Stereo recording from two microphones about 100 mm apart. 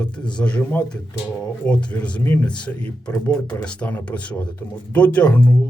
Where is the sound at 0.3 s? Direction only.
10° left (ahead or behind).